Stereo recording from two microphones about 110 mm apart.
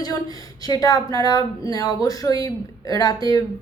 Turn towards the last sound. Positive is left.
turn(degrees=30)  # may be behind; listen again after turning